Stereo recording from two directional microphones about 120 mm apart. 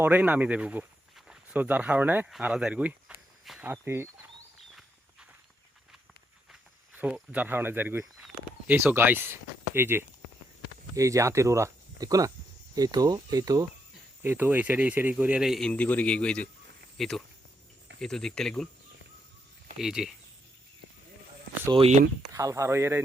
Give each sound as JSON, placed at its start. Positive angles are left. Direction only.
{"t": 0.0, "sound": "speech", "side_deg": -15}
{"t": 3.7, "sound": "speech", "side_deg": -20}
{"t": 6.5, "sound": "speech", "side_deg": -10}
{"t": 14.2, "sound": "speech", "side_deg": -15}
{"t": 15.7, "sound": "a man's voice", "side_deg": 10}
{"t": 19.8, "sound": "speech", "side_deg": -5}
{"t": 22.3, "sound": "speech", "side_deg": -25}